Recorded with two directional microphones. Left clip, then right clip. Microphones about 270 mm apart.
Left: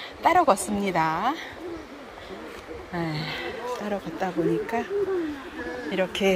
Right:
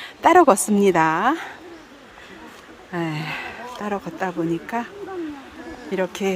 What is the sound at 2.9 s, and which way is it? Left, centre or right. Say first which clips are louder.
Speech: right 4 dB; centre.